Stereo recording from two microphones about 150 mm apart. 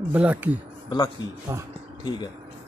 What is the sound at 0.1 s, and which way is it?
Speech, 10° right (ahead or behind).